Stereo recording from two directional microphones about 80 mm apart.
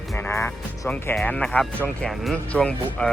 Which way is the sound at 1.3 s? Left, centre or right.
Centre.